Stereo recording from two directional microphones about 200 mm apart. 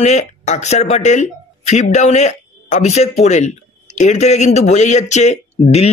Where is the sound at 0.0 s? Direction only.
35° left (ahead or behind).